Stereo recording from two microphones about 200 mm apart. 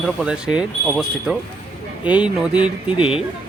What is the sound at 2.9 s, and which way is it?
Speech, 25° left (ahead or behind).